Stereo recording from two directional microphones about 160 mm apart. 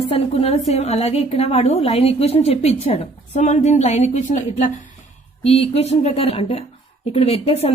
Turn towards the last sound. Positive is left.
turn(degrees=35)  # may be behind; listen again after turning